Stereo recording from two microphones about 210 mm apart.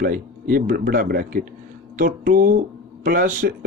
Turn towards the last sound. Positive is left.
turn(degrees=-40)  # may be behind; listen again after turning